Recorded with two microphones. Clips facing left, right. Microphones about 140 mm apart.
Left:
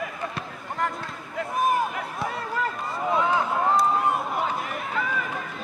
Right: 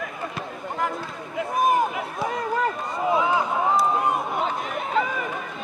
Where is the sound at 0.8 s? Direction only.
Centre (ahead or behind).